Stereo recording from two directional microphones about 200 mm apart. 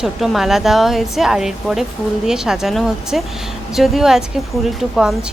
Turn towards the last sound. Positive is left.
turn(degrees=0)  # may be behind; listen again after turning